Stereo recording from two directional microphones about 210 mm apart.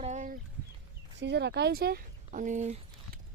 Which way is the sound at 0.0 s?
35° right (ahead or behind).